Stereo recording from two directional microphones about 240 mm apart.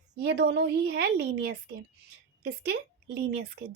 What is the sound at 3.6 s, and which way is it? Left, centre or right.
Speech, right.